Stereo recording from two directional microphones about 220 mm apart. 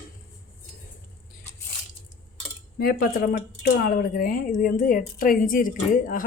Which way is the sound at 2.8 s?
40° left (ahead or behind).